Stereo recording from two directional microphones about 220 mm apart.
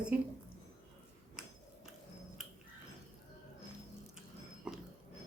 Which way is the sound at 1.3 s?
5° right (ahead or behind).